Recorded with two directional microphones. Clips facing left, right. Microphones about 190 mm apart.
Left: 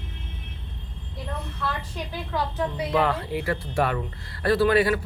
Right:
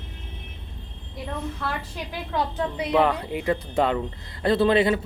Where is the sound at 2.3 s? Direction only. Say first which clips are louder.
Right 1 dB; 20° right (ahead or behind).